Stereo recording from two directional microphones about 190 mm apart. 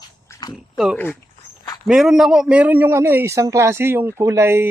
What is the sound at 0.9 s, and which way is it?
Speech, 10° left (ahead or behind).